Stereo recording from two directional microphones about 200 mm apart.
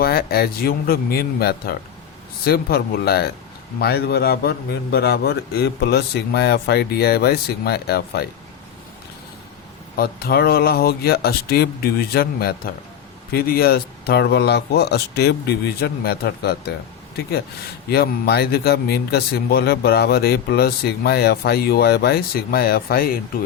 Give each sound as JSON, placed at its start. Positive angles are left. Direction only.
{"t": 0.0, "sound": "speech", "side_deg": 50}
{"t": 10.0, "sound": "speech", "side_deg": 50}
{"t": 17.8, "sound": "speech", "side_deg": 50}